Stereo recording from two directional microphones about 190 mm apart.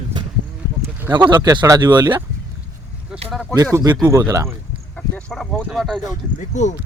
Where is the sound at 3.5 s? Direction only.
20° right (ahead or behind).